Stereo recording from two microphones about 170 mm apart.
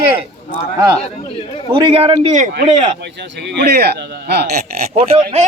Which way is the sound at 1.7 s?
30° right (ahead or behind).